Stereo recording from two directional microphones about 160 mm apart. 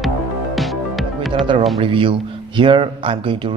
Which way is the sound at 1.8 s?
35° right (ahead or behind).